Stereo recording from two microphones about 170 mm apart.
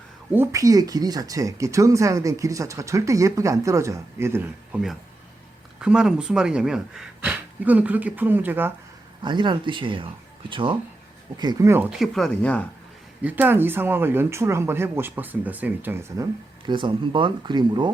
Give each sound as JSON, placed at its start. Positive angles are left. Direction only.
{"t": 0.3, "sound": "speech", "side_deg": -20}
{"t": 5.8, "sound": "speech", "side_deg": -5}
{"t": 9.2, "sound": "speech", "side_deg": -25}
{"t": 11.9, "sound": "speech", "side_deg": 0}
{"t": 13.2, "sound": "speech", "side_deg": -10}
{"t": 16.6, "sound": "speech", "side_deg": -30}